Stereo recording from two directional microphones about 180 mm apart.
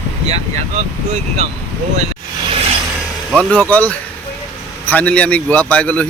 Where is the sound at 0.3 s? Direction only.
35° right (ahead or behind).